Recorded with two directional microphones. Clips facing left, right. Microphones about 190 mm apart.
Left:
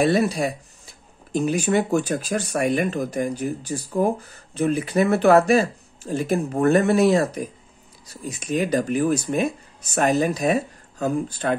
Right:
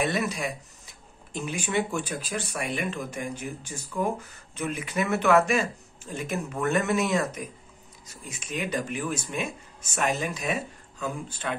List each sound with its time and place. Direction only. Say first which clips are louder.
0.0 s speech: left 8 dB; 35° left (ahead or behind)